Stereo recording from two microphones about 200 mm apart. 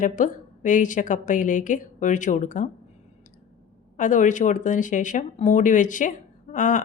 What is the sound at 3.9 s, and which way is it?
Speech, 40° left (ahead or behind).